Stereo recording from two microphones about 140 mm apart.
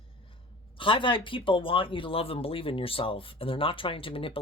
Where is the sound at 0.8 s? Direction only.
40° left (ahead or behind).